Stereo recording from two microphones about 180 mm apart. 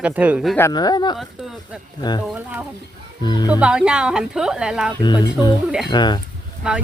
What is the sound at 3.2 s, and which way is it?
Speech, 25° left (ahead or behind).